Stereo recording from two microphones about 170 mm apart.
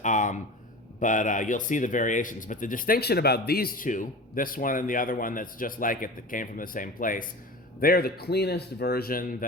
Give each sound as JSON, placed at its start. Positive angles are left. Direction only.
{"t": 0.0, "sound": "a man's voice", "side_deg": 50}